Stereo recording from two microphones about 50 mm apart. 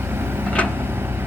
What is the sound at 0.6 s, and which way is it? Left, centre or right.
Vehicle, left.